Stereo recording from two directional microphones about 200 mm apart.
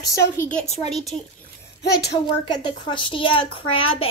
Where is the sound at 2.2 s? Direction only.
25° left (ahead or behind).